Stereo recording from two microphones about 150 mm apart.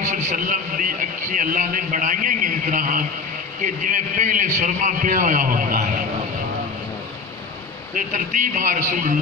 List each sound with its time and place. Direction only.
0.0 s a man's voice: 55° right (ahead or behind)
7.9 s a man's voice: 60° right (ahead or behind)